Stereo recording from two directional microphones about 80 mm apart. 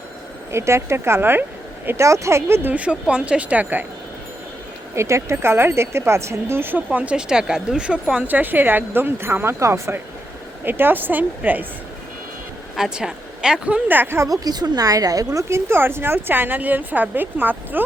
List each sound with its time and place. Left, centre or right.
0.5 s speech: right
2.0 s a woman's voice: right
4.9 s a woman's voice: right; by 8.2 s centre
8.3 s a woman's voice: right
10.7 s a woman's voice: right
12.7 s speech: centre
13.8 s a woman's voice: right
14.3 s a woman's voice: right